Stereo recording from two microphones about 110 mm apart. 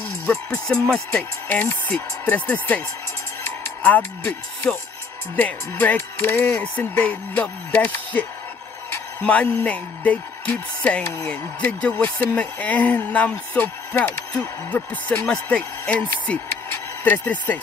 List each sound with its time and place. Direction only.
0.7 s speech: 5° left (ahead or behind)
1.5 s speech: 15° left (ahead or behind)
3.4 s music: 15° left (ahead or behind)
5.3 s speech: 15° left (ahead or behind)